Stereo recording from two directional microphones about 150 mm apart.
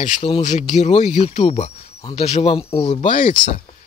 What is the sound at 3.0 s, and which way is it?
Speech, 60° left (ahead or behind).